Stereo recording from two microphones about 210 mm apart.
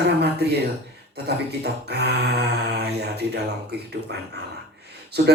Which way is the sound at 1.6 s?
50° right (ahead or behind).